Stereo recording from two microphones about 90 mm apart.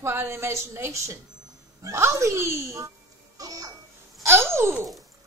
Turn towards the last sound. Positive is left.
turn(degrees=-30)  # may be behind; listen again after turning